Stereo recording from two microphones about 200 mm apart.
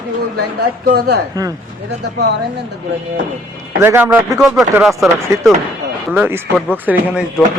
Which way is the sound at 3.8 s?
10° right (ahead or behind).